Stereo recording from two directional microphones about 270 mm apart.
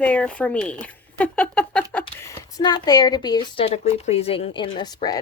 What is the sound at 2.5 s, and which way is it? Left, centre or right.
Speech, centre.